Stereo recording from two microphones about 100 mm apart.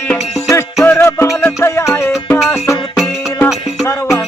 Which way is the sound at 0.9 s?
25° left (ahead or behind).